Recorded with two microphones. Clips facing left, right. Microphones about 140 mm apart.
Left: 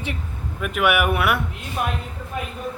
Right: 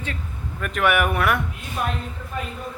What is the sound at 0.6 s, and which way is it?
Speech, 5° left (ahead or behind).